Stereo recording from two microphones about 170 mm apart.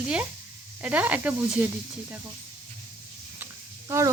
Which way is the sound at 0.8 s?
10° right (ahead or behind).